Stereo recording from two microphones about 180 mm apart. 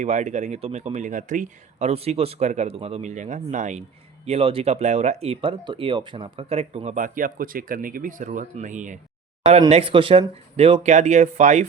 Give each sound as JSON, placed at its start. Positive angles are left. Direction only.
{"t": 0.0, "sound": "speech", "side_deg": -40}
{"t": 9.6, "sound": "speech", "side_deg": -35}